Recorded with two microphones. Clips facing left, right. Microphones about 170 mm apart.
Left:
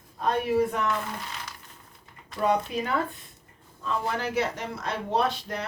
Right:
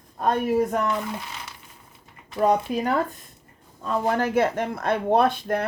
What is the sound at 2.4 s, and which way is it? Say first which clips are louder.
Speech: right 4 dB; 45° right (ahead or behind).